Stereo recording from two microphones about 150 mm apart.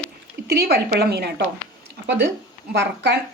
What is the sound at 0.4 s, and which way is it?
Speech, 90° right.